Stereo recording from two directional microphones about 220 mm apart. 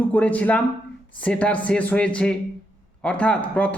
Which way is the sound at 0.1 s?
5° left (ahead or behind).